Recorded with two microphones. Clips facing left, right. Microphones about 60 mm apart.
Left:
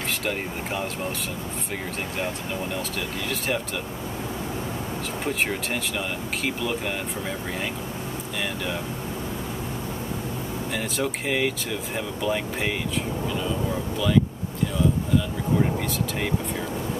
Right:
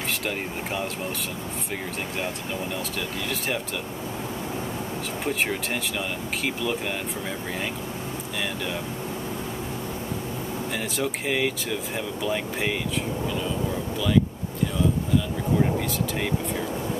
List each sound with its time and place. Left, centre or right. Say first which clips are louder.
0.2 s speech: left 1 dB; centre
5.2 s speech: even; centre
10.7 s speech: left 2 dB; centre
13.3 s vehicle: left 2 dB; centre